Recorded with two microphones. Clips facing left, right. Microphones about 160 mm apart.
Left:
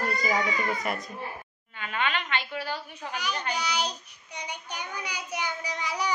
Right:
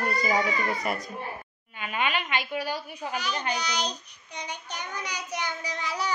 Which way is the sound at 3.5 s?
10° left (ahead or behind).